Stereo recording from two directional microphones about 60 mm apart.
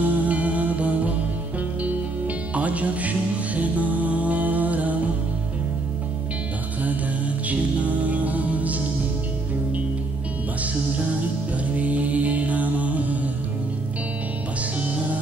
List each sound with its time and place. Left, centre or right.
0.0 s music: right
7.4 s music: right
11.5 s music: right
14.8 s music: right